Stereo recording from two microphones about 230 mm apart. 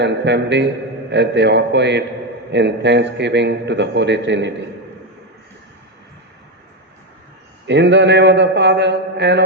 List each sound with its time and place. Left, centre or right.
0.0 s a man's voice: right
7.7 s a man's voice: right